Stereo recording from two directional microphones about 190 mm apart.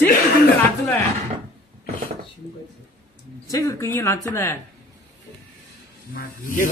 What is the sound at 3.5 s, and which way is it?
Speech, 15° left (ahead or behind).